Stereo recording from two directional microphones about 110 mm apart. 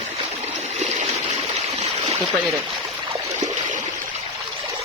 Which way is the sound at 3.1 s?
90° right.